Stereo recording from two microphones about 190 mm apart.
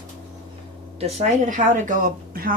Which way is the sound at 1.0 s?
35° right (ahead or behind).